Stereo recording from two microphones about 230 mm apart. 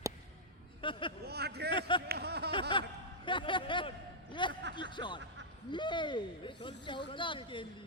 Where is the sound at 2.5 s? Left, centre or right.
Left.